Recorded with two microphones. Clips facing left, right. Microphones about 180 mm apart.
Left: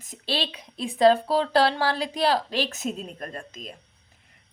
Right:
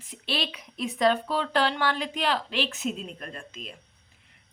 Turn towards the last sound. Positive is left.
turn(degrees=40)  # may be behind; listen again after turning